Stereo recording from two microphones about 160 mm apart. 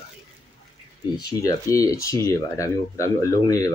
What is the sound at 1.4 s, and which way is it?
Speech, 20° left (ahead or behind).